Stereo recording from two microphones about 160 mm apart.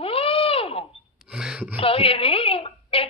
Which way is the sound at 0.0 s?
35° left (ahead or behind).